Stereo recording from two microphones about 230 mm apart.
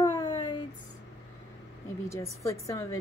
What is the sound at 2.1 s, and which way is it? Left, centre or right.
Speech, centre.